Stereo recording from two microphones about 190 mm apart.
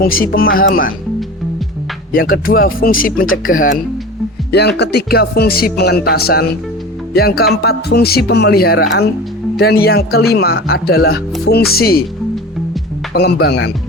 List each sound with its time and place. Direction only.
0.0 s speech: 50° left (ahead or behind)
2.1 s speech: 50° left (ahead or behind)
4.8 s speech: 60° left (ahead or behind)
13.1 s speech: 60° left (ahead or behind)